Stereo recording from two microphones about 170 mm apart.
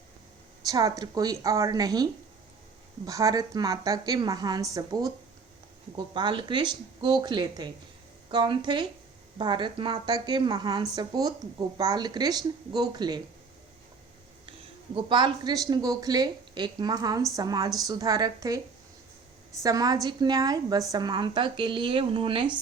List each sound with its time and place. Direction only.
0.7 s speech: 20° right (ahead or behind)
3.1 s speech: 20° right (ahead or behind)
6.1 s speech: 25° right (ahead or behind)
14.9 s speech: 25° right (ahead or behind)
19.6 s speech: 20° right (ahead or behind)